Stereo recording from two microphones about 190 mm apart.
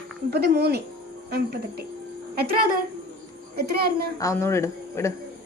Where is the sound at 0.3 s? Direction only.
60° right (ahead or behind).